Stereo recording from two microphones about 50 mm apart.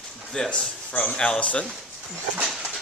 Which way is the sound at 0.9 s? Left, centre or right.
Left.